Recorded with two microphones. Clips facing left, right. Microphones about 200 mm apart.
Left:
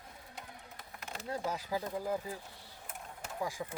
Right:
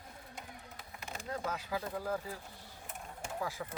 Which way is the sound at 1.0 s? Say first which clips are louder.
Left 2 dB; 5° left (ahead or behind).